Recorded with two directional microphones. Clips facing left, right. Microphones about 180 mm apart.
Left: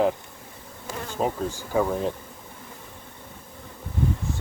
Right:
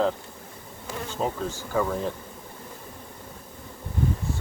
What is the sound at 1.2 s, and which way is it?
Speech, 15° left (ahead or behind).